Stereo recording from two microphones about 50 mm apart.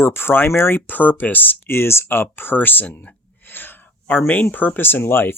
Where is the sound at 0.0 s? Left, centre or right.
Left.